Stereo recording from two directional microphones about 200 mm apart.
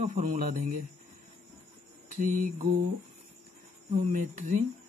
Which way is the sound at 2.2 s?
40° right (ahead or behind).